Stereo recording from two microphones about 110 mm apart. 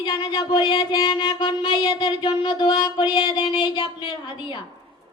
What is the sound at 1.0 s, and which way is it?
Music, 45° left (ahead or behind).